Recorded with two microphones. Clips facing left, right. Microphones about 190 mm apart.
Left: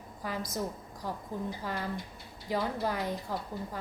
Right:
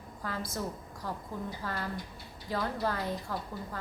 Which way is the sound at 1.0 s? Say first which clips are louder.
Left 2 dB; 15° left (ahead or behind).